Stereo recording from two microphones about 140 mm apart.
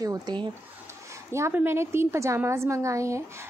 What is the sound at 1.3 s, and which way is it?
A woman's voice, 20° right (ahead or behind).